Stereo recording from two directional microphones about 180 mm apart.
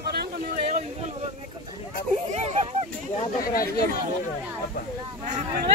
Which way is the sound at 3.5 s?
50° left (ahead or behind).